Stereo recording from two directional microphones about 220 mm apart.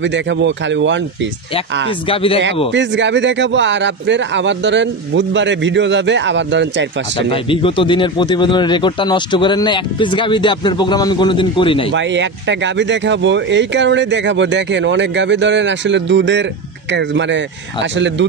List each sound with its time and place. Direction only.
0.0 s speech: 55° right (ahead or behind)
2.0 s speech: 25° left (ahead or behind)
2.7 s speech: 55° right (ahead or behind)
7.2 s speech: 25° left (ahead or behind)
11.9 s speech: 55° right (ahead or behind)